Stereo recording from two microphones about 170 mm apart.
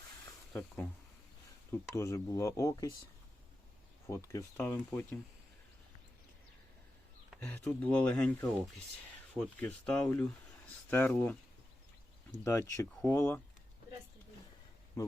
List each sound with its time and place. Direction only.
1.7 s speech: 15° left (ahead or behind)
4.1 s speech: 15° left (ahead or behind)
7.3 s speech: 10° left (ahead or behind)
12.5 s speech: 15° left (ahead or behind)
15.0 s speech: 15° left (ahead or behind)